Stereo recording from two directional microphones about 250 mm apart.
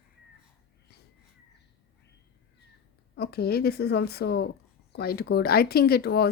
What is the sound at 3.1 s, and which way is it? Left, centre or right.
Speech, left.